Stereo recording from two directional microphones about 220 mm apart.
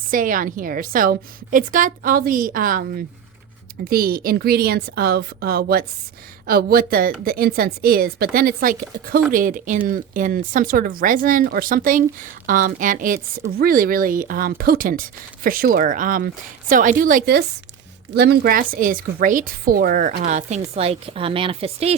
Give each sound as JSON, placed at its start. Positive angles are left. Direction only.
{"t": 0.1, "sound": "a woman's voice", "side_deg": -40}